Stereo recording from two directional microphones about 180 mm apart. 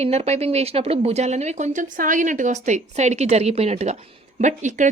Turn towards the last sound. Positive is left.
turn(degrees=-40)  # may be behind; listen again after turning